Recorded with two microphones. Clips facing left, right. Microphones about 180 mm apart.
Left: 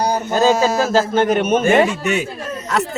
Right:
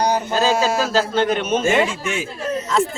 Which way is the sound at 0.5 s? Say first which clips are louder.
Left 3 dB; 45° left (ahead or behind).